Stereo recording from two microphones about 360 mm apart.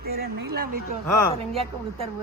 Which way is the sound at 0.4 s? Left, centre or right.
Right.